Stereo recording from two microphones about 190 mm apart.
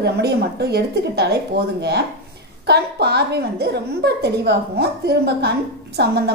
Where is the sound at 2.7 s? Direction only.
60° right (ahead or behind).